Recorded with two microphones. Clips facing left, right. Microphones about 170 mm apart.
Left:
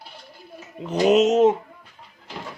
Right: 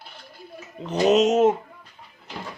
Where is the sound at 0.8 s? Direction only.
10° left (ahead or behind).